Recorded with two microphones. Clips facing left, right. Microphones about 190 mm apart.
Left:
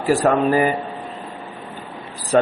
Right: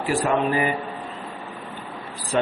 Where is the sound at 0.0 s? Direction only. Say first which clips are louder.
Left 5 dB; 40° left (ahead or behind).